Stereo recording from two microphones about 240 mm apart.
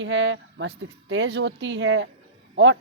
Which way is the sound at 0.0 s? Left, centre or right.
Right.